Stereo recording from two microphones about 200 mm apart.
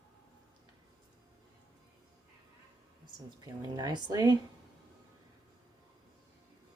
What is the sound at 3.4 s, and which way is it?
Speech, 20° right (ahead or behind).